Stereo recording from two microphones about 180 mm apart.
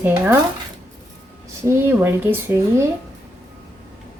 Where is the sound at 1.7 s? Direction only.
10° right (ahead or behind).